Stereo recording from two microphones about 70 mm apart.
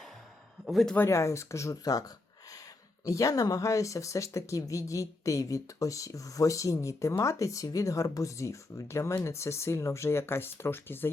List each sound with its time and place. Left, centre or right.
0.6 s a man's voice: centre
0.9 s speech: left